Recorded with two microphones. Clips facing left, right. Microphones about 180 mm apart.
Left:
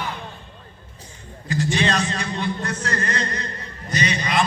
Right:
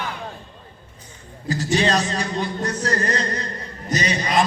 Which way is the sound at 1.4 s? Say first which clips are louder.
Right 1 dB; 40° right (ahead or behind).